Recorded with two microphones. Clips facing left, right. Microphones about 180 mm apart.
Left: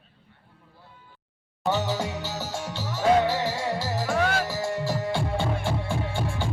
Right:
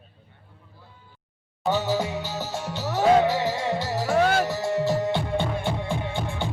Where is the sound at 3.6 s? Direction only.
Centre (ahead or behind).